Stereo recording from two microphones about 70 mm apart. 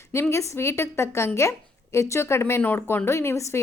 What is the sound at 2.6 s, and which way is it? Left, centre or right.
Speech, left.